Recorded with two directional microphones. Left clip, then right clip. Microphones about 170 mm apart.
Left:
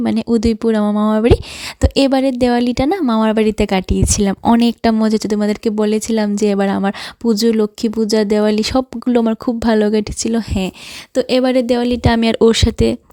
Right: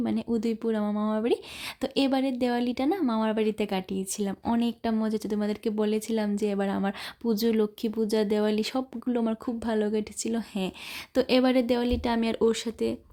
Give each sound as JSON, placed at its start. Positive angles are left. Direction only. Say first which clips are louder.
{"t": 0.0, "sound": "speech", "louder": "left 13 dB", "side_deg": 50}